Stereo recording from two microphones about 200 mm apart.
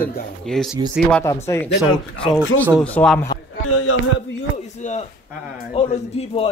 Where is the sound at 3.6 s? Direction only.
90° left.